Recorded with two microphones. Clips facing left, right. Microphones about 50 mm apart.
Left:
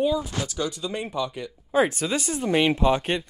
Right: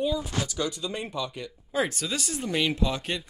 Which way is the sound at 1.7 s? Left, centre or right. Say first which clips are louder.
Left 6 dB; left.